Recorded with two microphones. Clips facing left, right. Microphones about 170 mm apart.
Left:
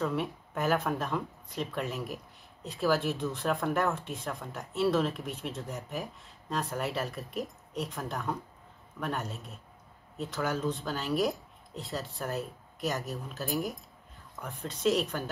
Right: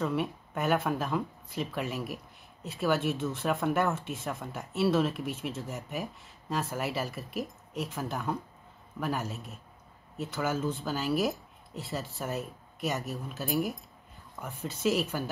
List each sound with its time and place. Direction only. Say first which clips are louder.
0.0 s speech: right 1 dB; centre (ahead or behind)